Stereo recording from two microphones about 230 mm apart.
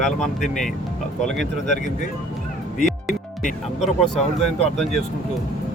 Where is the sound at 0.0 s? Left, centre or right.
Centre.